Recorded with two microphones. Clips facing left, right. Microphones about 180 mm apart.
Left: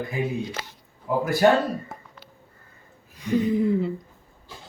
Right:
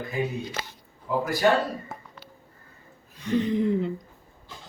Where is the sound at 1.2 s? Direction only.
50° left (ahead or behind).